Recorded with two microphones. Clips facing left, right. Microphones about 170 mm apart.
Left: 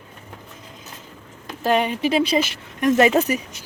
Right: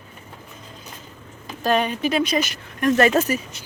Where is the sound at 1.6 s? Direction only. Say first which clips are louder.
Left 1 dB; 20° left (ahead or behind).